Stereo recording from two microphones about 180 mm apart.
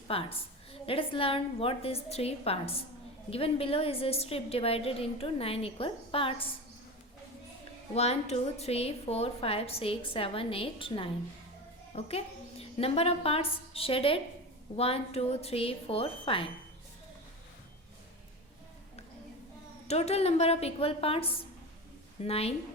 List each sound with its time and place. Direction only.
0.1 s a woman's voice: 30° left (ahead or behind)
7.9 s a woman's voice: 35° left (ahead or behind)
19.9 s a woman's voice: 35° left (ahead or behind)